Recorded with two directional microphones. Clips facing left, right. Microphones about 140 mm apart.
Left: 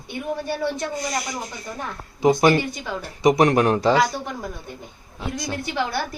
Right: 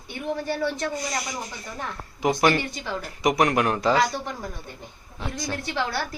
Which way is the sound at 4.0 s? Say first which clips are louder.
Left 2 dB; 10° left (ahead or behind).